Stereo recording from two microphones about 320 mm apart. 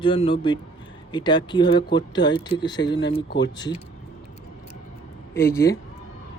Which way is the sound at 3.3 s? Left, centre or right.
Left.